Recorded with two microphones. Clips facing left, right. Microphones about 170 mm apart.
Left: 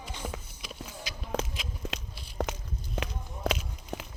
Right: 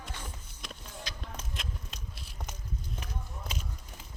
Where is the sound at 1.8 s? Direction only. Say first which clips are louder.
Left 9 dB; 85° left.